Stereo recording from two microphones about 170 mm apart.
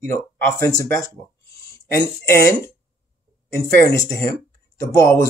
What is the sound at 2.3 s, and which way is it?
Speech, 20° left (ahead or behind).